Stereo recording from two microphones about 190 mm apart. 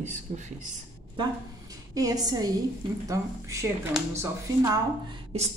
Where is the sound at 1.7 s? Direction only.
20° right (ahead or behind).